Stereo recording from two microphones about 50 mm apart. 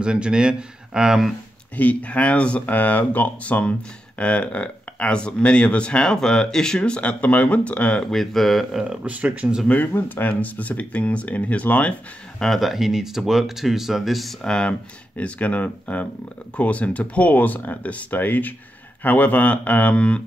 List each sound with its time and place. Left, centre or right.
0.0 s speech: centre
1.8 s speech: left
8.0 s speech: centre
8.8 s speech: right
9.7 s speech: left
12.5 s speech: centre
14.4 s speech: centre
14.7 s speech: left